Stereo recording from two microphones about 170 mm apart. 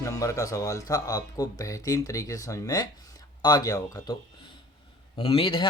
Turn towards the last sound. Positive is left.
turn(degrees=30)  # may be behind; listen again after turning